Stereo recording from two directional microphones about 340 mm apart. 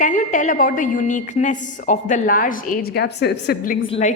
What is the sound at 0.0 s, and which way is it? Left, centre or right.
A woman's voice, left.